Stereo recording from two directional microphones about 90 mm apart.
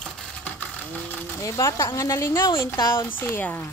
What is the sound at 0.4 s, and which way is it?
Ratchet, 15° left (ahead or behind).